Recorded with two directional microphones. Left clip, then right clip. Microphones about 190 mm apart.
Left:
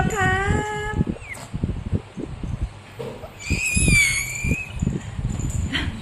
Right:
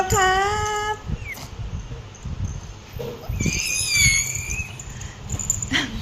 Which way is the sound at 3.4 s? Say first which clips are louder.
Left 1 dB; 20° left (ahead or behind).